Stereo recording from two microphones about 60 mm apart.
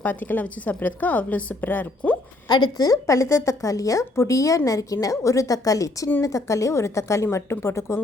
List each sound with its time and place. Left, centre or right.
0.0 s a woman's voice: left
2.7 s a woman's voice: left